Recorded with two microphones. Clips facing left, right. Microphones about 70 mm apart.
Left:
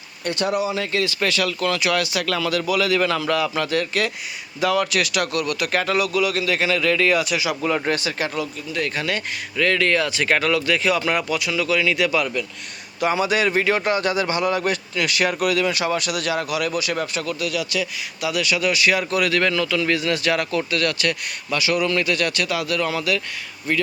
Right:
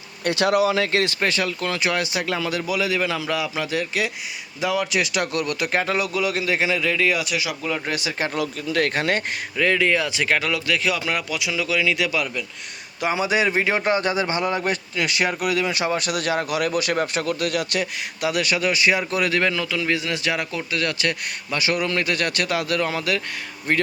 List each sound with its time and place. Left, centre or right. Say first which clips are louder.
0.3 s speech: right 3 dB; right
1.2 s a man's voice: left 2 dB; right; by 7.5 s centre
7.9 s speech: left 4 dB; centre
8.4 s speech: right 3 dB; right
9.0 s speech: right 3 dB; right
9.6 s speech: left 1 dB; centre
10.2 s speech: left 3 dB; centre
13.0 s a man's voice: left 1 dB; centre
19.4 s a man's voice: left 2 dB; centre; by 23.8 s right